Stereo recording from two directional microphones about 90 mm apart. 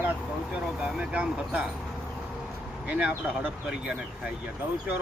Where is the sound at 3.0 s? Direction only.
15° right (ahead or behind).